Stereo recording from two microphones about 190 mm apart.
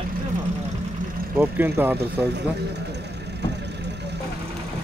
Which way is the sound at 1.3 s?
10° right (ahead or behind).